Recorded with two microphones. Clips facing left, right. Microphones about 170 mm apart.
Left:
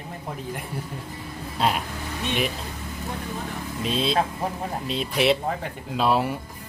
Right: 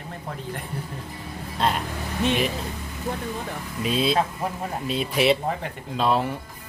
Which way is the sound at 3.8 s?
5° right (ahead or behind).